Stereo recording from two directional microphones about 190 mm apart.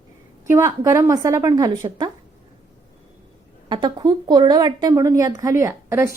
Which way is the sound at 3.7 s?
25° right (ahead or behind).